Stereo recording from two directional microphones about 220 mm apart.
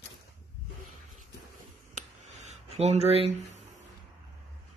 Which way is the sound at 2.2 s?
30° right (ahead or behind).